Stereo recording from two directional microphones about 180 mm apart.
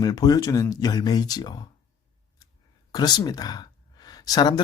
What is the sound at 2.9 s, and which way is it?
Speech, 20° left (ahead or behind).